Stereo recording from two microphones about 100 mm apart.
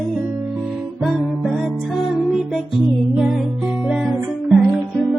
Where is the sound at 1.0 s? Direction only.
5° right (ahead or behind).